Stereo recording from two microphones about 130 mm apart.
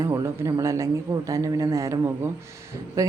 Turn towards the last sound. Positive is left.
turn(degrees=-25)  # may be behind; listen again after turning